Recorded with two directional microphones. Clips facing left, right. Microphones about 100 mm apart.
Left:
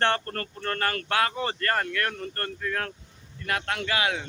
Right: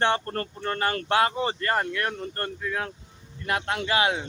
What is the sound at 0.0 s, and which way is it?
Speech, 15° right (ahead or behind).